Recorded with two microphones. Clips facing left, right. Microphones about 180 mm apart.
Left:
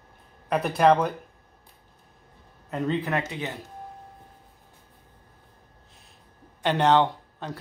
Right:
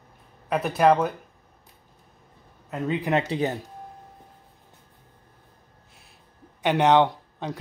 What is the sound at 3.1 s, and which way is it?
Speech, 35° right (ahead or behind).